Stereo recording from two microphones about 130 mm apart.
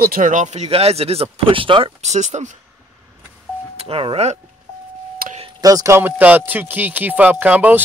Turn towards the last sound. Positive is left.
turn(degrees=-10)  # may be behind; listen again after turning